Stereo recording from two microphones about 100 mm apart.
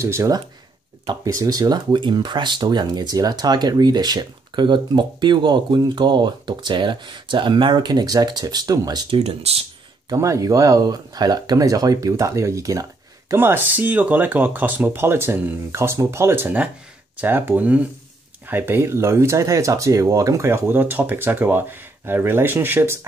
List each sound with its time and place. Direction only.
0.0 s speech: 25° right (ahead or behind)
9.1 s speech: 80° right
10.0 s speech: 35° right (ahead or behind)
16.4 s speech: 10° right (ahead or behind)